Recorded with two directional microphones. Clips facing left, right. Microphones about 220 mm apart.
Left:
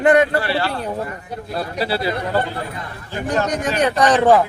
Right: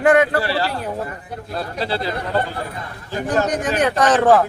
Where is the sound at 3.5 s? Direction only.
5° right (ahead or behind).